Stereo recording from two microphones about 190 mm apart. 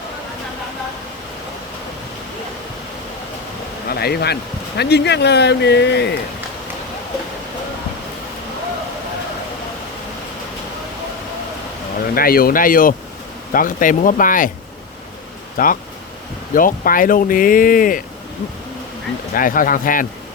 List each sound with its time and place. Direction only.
3.8 s speech: 55° left (ahead or behind)
12.1 s speech: 50° left (ahead or behind)
15.5 s speech: 45° left (ahead or behind)
19.3 s speech: 45° left (ahead or behind)